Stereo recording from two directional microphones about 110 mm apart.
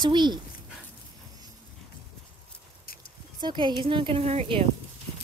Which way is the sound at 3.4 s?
45° right (ahead or behind).